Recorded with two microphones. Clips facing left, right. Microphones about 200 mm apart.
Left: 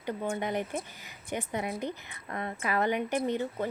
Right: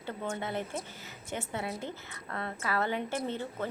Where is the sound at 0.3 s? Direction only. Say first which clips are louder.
Left 3 dB; 15° left (ahead or behind).